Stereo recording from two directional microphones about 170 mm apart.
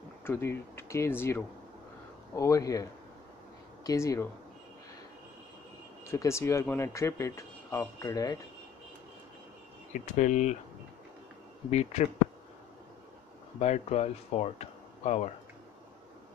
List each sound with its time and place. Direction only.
0.2 s a man's voice: 15° left (ahead or behind)
6.0 s a man's voice: 15° left (ahead or behind)
10.1 s speech: 45° left (ahead or behind)
11.7 s speech: 40° left (ahead or behind)
13.6 s speech: 40° left (ahead or behind)